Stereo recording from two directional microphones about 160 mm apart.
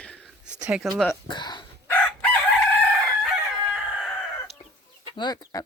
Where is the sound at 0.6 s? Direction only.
5° right (ahead or behind).